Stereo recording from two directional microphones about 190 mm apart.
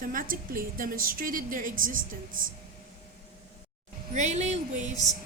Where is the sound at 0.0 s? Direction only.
45° right (ahead or behind).